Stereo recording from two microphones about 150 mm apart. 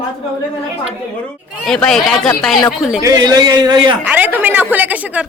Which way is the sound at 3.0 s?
25° right (ahead or behind).